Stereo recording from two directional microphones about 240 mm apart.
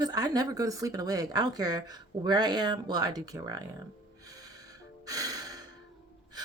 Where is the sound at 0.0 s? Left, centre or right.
Centre.